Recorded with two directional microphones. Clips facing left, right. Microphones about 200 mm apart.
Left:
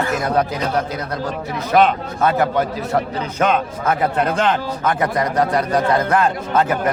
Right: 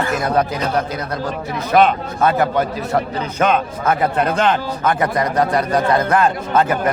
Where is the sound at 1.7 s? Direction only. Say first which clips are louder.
Right 1 dB; 55° right (ahead or behind).